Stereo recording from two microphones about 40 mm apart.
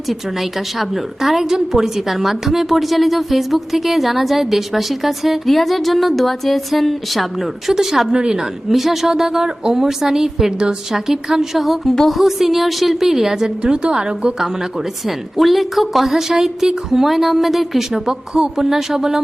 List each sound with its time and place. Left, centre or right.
0.1 s a woman's voice: centre
8.1 s a woman's voice: centre
8.7 s a woman's voice: centre
11.9 s music: centre
12.2 s a woman's voice: centre; by 14.3 s right
15.0 s a woman's voice: centre